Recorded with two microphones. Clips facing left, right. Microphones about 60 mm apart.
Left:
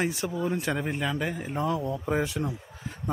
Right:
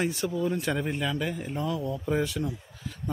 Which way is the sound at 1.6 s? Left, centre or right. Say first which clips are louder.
Left 3 dB; left.